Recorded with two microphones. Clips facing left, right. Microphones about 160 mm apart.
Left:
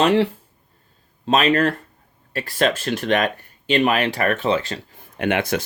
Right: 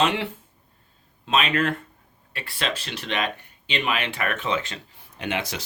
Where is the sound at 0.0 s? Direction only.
40° left (ahead or behind).